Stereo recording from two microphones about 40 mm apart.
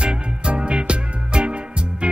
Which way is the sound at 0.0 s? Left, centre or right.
Right.